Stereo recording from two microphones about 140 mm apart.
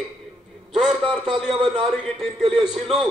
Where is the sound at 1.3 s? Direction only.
40° right (ahead or behind).